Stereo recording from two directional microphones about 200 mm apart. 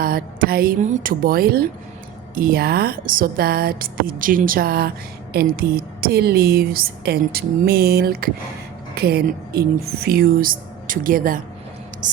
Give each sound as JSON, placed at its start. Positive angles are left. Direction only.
{"t": 0.0, "sound": "speech", "side_deg": -45}